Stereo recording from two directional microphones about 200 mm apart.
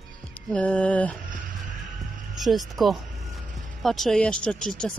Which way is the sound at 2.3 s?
Centre (ahead or behind).